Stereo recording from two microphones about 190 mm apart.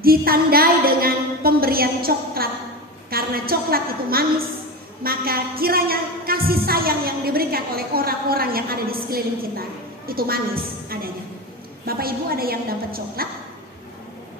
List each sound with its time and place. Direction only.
0.0 s a woman's voice: 50° right (ahead or behind)